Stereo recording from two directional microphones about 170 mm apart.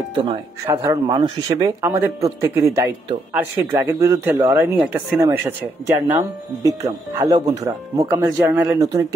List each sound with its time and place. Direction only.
0.1 s speech: 30° right (ahead or behind)
1.9 s speech: 15° right (ahead or behind)